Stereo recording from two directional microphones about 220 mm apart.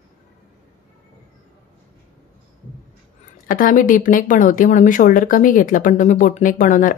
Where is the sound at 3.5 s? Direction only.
35° left (ahead or behind).